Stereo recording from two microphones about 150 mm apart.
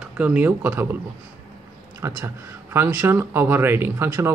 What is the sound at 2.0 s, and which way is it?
Speech, 20° right (ahead or behind).